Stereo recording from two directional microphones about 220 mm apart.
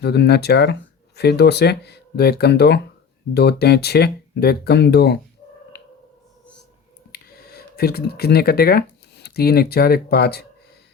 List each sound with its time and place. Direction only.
0.0 s speech: 50° left (ahead or behind)
7.1 s speech: 45° left (ahead or behind)